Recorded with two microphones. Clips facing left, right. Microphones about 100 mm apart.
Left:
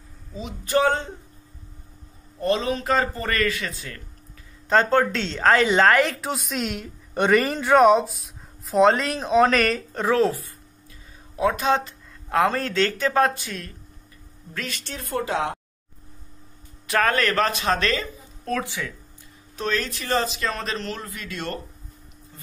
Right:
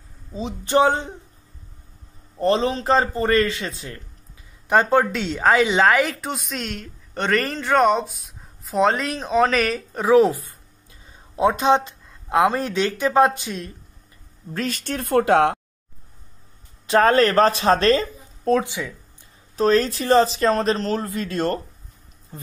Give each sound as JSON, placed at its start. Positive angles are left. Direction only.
{"t": 0.3, "sound": "speech", "side_deg": -30}
{"t": 2.4, "sound": "speech", "side_deg": -30}
{"t": 4.6, "sound": "a woman's voice", "side_deg": -15}
{"t": 14.5, "sound": "speech", "side_deg": -40}
{"t": 16.8, "sound": "speech", "side_deg": -25}
{"t": 18.6, "sound": "speech", "side_deg": -15}
{"t": 19.5, "sound": "speech", "side_deg": -35}